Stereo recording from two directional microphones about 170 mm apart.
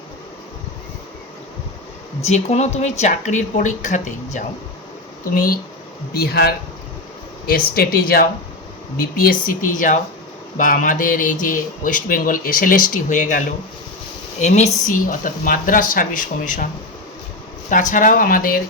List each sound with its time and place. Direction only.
2.2 s speech: 40° left (ahead or behind)
5.3 s speech: 60° left (ahead or behind)
14.4 s speech: 40° left (ahead or behind)
17.7 s speech: 50° left (ahead or behind)